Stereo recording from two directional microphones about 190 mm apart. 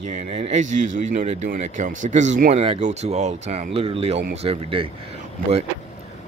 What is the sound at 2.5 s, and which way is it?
Speech, 30° right (ahead or behind).